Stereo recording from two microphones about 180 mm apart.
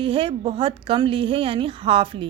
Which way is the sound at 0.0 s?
30° right (ahead or behind).